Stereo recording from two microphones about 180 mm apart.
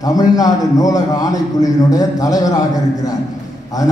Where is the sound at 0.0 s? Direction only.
20° left (ahead or behind).